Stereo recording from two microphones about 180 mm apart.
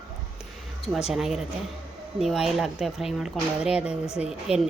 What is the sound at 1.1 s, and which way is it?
Speech, centre (ahead or behind).